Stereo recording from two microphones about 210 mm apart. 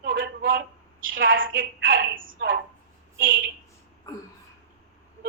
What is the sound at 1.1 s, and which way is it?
Speech, 65° right (ahead or behind).